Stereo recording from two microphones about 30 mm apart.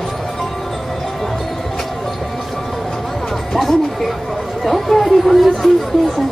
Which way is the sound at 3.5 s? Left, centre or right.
Centre.